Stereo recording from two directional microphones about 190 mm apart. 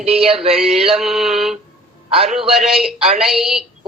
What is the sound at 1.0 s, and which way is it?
A man's voice, centre (ahead or behind).